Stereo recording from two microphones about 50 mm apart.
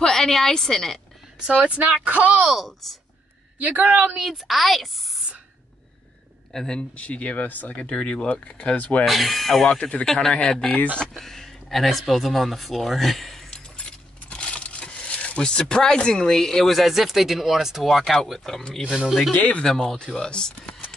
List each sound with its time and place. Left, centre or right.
0.0 s a woman's voice: centre
1.5 s speech: right
2.5 s a woman's voice: centre
3.5 s speech: right
4.1 s a woman's voice: centre
6.5 s speech: centre
7.0 s speech: left
9.0 s a woman's voice: centre
9.8 s speech: left
11.1 s speech: centre
13.7 s speech: centre
18.9 s speech: centre
19.3 s speech: left
19.6 s speech: centre